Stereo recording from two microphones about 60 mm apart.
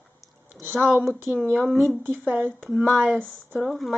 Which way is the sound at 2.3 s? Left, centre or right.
Right.